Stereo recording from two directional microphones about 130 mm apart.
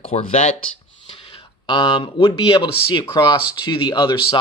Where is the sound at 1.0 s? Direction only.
40° left (ahead or behind).